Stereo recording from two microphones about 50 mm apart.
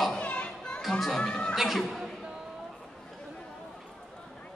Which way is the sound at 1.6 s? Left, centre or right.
Centre.